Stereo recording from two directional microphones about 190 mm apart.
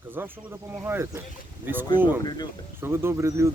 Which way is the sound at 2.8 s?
10° right (ahead or behind).